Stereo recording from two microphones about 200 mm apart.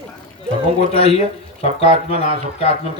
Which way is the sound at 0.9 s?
30° left (ahead or behind).